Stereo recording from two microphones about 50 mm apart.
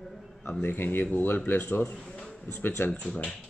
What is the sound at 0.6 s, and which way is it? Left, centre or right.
Speech, left.